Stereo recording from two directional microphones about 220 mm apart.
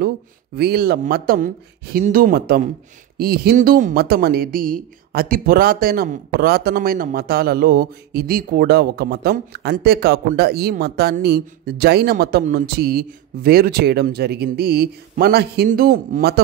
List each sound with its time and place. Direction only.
0.6 s speech: 45° right (ahead or behind)